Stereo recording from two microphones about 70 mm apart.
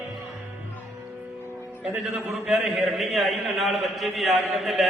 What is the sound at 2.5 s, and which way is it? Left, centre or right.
A man's voice, centre.